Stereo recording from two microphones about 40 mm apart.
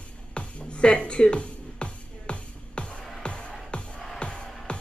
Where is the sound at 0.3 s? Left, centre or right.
Left.